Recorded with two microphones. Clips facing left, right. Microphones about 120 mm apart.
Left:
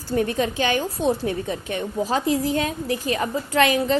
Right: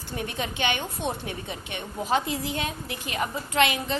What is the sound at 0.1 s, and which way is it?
A woman's voice, 40° left (ahead or behind).